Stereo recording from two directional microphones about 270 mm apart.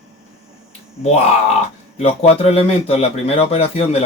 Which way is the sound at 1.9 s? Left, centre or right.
Left.